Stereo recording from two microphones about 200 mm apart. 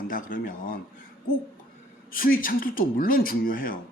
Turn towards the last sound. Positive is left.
turn(degrees=45)  # may be behind; listen again after turning